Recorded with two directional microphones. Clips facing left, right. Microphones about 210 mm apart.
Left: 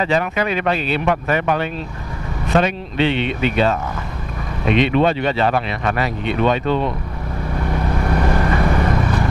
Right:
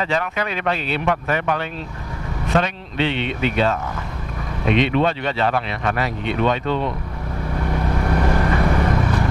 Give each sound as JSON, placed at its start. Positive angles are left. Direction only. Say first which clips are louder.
{"t": 0.0, "sound": "speech", "louder": "left 4 dB", "side_deg": 10}
{"t": 7.5, "sound": "vehicle", "louder": "left 1 dB", "side_deg": 20}